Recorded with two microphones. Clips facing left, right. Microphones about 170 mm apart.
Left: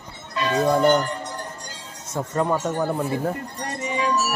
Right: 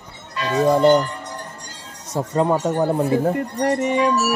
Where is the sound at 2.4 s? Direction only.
20° right (ahead or behind).